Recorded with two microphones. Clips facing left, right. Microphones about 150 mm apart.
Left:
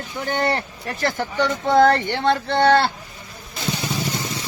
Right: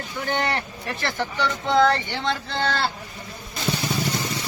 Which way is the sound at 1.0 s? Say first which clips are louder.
Left 4 dB; 45° left (ahead or behind).